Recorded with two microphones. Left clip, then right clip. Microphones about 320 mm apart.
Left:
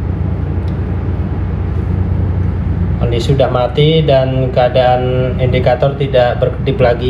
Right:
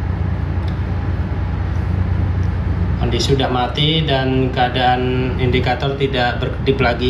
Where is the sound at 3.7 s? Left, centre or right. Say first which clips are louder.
Left 7 dB; centre.